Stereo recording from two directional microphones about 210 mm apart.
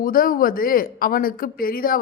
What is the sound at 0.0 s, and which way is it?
A woman's voice, 40° left (ahead or behind).